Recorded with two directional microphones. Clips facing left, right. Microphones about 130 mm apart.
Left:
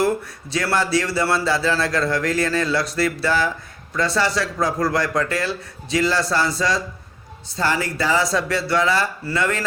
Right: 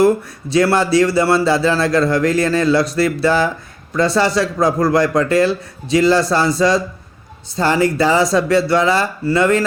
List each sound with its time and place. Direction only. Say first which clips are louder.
0.5 s a man's voice: right 7 dB; 20° right (ahead or behind)